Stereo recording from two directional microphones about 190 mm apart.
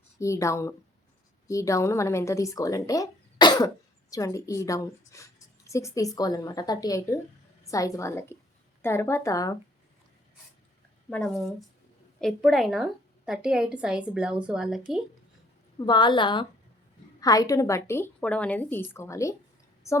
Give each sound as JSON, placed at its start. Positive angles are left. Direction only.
{"t": 0.2, "sound": "a woman's voice", "side_deg": 15}
{"t": 11.1, "sound": "a woman's voice", "side_deg": 5}
{"t": 15.8, "sound": "a woman's voice", "side_deg": 25}